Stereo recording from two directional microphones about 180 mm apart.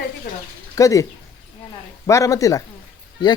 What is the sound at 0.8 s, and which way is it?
Speech, 20° left (ahead or behind).